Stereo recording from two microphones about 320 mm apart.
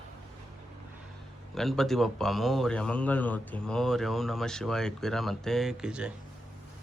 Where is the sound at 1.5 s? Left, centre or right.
Centre.